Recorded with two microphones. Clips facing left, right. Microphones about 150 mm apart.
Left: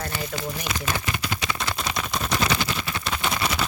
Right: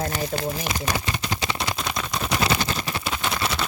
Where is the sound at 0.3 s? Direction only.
35° right (ahead or behind).